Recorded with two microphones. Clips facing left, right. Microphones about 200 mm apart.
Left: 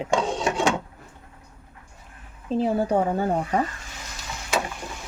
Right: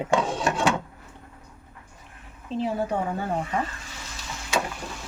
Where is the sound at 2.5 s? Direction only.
35° left (ahead or behind).